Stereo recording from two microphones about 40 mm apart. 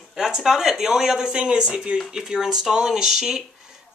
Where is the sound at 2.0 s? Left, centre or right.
Centre.